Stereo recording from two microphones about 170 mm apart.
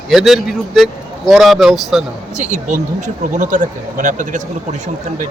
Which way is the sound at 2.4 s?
45° right (ahead or behind).